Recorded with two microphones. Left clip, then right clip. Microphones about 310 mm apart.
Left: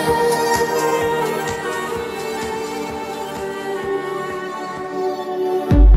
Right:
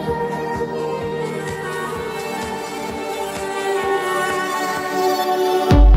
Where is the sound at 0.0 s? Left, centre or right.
Left.